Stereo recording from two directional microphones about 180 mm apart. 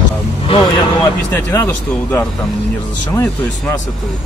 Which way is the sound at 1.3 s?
15° left (ahead or behind).